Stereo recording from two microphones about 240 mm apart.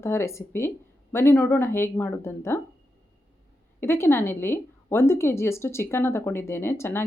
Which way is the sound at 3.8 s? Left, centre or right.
Centre.